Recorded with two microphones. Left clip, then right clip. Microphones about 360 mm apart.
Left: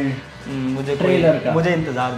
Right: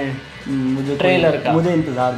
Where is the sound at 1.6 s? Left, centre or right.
Centre.